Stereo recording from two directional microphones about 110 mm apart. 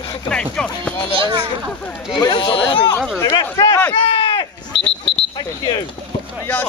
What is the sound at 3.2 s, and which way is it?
Speech, 35° left (ahead or behind).